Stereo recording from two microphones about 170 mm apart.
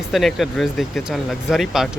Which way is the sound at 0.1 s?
Centre (ahead or behind).